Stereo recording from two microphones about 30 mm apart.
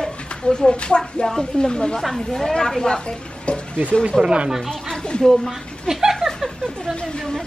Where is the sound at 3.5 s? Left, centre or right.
Left.